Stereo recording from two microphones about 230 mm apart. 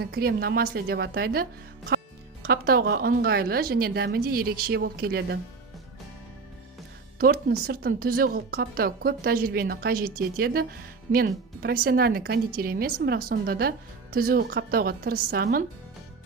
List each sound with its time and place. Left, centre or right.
0.0 s speech: right
7.2 s speech: right